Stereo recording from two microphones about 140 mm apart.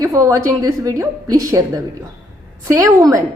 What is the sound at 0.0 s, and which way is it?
A woman's voice, 20° right (ahead or behind).